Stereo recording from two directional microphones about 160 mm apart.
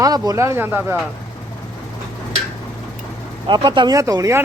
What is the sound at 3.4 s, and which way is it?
Speech, 30° right (ahead or behind).